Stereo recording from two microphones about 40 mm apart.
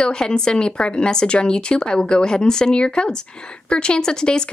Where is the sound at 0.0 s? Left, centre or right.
Left.